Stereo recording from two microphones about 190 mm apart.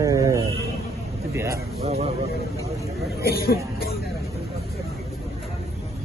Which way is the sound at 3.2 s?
55° left (ahead or behind).